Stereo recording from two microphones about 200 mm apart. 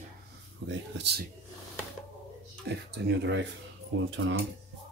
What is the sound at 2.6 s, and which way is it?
Speech, 60° right (ahead or behind).